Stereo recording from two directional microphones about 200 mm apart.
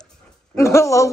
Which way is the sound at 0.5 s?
15° left (ahead or behind).